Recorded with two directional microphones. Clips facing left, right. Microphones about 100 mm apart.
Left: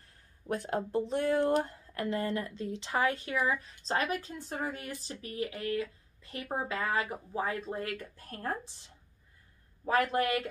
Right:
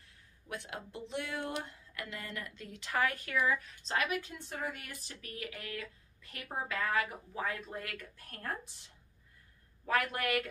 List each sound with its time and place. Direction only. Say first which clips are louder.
0.5 s speech: left 11 dB; 40° left (ahead or behind)
9.8 s speech: left 5 dB; 30° left (ahead or behind)